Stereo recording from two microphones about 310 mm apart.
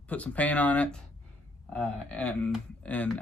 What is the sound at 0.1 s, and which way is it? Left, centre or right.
Speech, centre.